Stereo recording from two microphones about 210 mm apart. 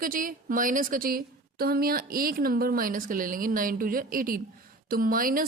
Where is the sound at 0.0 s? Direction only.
40° right (ahead or behind).